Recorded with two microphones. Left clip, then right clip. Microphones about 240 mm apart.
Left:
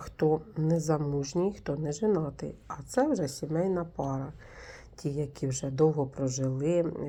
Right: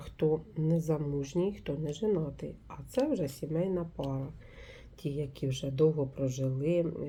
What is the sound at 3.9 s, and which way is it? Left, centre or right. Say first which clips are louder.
Speech: left 4 dB; centre.